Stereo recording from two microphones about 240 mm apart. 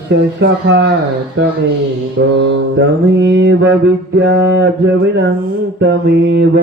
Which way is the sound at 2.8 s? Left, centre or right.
Right.